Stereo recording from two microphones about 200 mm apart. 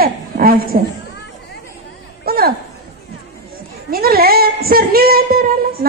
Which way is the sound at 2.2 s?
50° right (ahead or behind).